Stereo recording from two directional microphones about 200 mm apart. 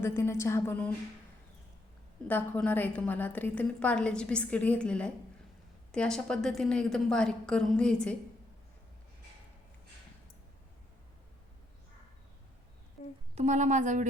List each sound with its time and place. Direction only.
0.0 s a woman's voice: 15° left (ahead or behind)
2.2 s a woman's voice: 10° left (ahead or behind)
13.3 s a woman's voice: 35° right (ahead or behind)